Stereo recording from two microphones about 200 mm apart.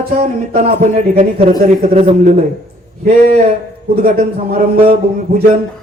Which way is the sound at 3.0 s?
45° right (ahead or behind).